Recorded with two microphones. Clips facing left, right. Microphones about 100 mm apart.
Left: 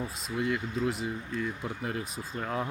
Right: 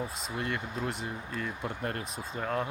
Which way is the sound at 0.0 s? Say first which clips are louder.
Left 3 dB; centre (ahead or behind).